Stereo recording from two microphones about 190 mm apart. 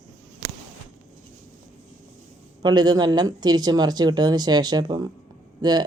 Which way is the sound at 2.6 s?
20° right (ahead or behind).